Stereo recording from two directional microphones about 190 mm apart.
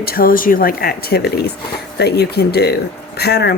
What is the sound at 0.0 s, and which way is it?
Speech, 50° left (ahead or behind).